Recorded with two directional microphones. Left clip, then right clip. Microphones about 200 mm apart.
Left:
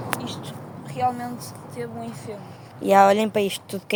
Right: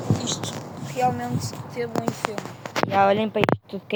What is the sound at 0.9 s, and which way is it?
Speech, 35° right (ahead or behind).